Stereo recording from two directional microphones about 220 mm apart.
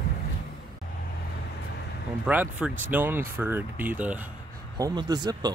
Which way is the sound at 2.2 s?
5° right (ahead or behind).